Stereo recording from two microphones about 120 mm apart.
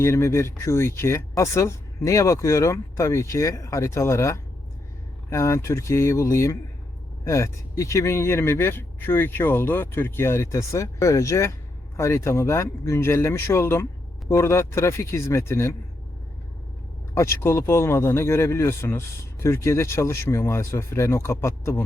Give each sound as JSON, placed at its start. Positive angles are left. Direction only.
{"t": 0.0, "sound": "speech", "side_deg": 25}
{"t": 17.2, "sound": "speech", "side_deg": 20}